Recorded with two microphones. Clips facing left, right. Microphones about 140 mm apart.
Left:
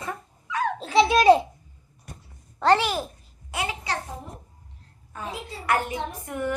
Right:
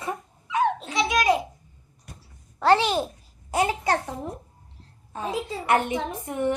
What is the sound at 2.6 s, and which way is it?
Speech, 10° right (ahead or behind).